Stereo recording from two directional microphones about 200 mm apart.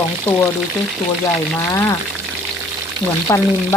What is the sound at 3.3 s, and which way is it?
Speech, 15° left (ahead or behind).